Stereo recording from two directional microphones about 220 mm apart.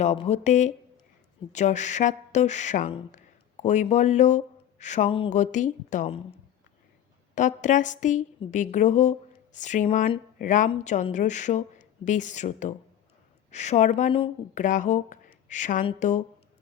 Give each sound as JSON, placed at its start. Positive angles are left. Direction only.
{"t": 0.0, "sound": "speech", "side_deg": 30}
{"t": 7.3, "sound": "speech", "side_deg": 35}